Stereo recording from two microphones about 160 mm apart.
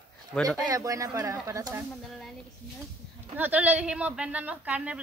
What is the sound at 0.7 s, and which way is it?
Speech, 20° right (ahead or behind).